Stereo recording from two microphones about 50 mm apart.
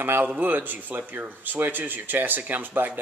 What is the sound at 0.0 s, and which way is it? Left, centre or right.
Speech, right.